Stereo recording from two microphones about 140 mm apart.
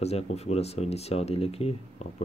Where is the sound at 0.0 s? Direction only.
50° left (ahead or behind).